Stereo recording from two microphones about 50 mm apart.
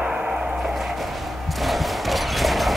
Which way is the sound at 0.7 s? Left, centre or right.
Centre.